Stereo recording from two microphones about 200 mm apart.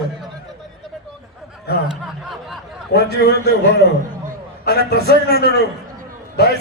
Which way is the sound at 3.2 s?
55° left (ahead or behind).